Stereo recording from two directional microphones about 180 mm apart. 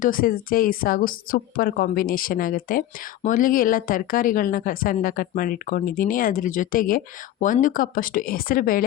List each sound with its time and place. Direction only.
0.0 s speech: 50° left (ahead or behind)